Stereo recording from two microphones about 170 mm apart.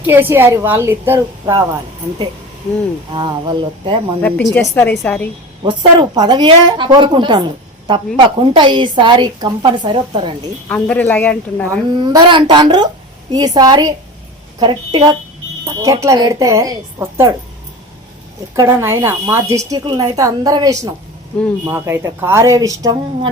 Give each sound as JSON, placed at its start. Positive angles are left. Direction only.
{"t": 0.0, "sound": "a woman's voice", "side_deg": -10}
{"t": 3.1, "sound": "a woman's voice", "side_deg": -30}
{"t": 4.2, "sound": "speech", "side_deg": 10}
{"t": 5.6, "sound": "a woman's voice", "side_deg": -25}
{"t": 10.7, "sound": "speech", "side_deg": 10}
{"t": 11.9, "sound": "a woman's voice", "side_deg": -25}
{"t": 15.6, "sound": "a woman's voice", "side_deg": -15}
{"t": 18.5, "sound": "a woman's voice", "side_deg": -15}